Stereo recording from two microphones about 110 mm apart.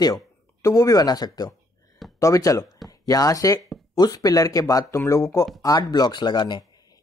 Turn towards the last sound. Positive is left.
turn(degrees=45)  # may be behind; listen again after turning